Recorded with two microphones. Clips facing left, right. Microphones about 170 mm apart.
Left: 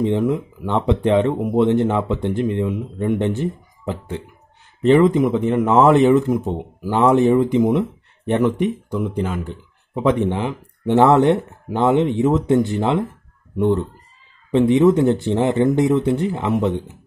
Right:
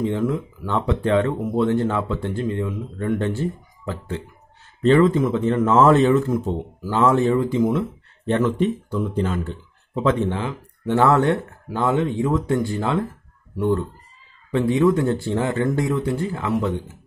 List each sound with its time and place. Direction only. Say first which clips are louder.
0.0 s speech: left 4 dB; 20° left (ahead or behind)